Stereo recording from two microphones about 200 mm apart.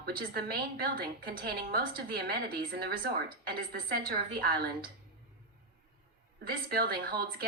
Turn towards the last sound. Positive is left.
turn(degrees=-50)  # may be behind; listen again after turning